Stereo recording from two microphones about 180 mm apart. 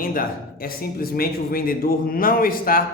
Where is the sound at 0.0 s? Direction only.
50° left (ahead or behind).